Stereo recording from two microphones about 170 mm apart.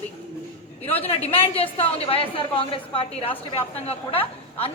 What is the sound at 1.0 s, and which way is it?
A man's voice, 35° left (ahead or behind).